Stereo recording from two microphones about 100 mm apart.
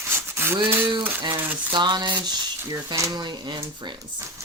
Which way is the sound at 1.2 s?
55° right (ahead or behind).